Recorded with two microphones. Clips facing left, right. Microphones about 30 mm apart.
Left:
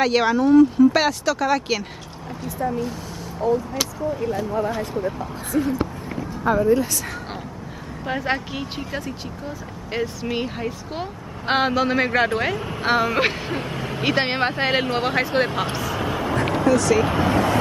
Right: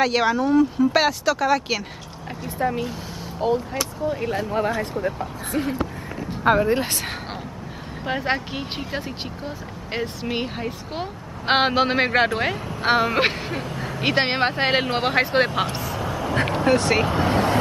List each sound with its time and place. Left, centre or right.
0.0 s speech: centre
2.4 s speech: right
6.4 s speech: right
6.7 s speech: right
8.0 s speech: centre
8.7 s a man's voice: right
9.9 s speech: centre
11.4 s a man's voice: right
12.4 s speech: centre
13.6 s a sound: left
14.0 s a man's voice: centre
15.9 s quack: left
16.6 s speech: right